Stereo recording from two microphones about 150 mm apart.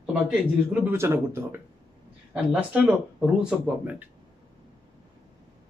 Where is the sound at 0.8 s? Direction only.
15° right (ahead or behind).